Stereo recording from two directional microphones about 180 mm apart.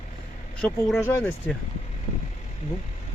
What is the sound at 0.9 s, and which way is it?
Speech, 15° left (ahead or behind).